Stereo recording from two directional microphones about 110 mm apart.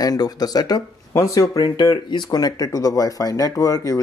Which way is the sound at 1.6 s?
40° left (ahead or behind).